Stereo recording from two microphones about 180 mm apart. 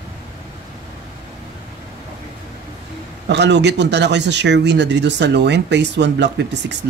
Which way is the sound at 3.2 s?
70° right (ahead or behind).